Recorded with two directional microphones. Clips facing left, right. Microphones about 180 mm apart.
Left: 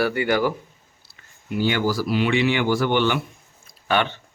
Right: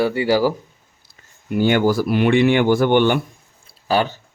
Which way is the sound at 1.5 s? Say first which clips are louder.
Right 6 dB; 50° right (ahead or behind).